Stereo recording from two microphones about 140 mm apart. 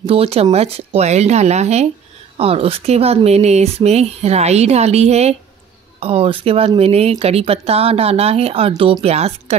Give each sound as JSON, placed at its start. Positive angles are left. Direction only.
{"t": 0.0, "sound": "speech", "side_deg": -45}